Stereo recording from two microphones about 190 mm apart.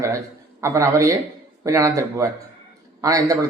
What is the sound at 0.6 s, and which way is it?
A man's voice, 15° right (ahead or behind).